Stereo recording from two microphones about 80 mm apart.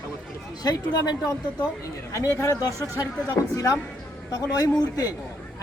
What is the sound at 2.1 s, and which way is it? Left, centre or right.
A woman's voice, left.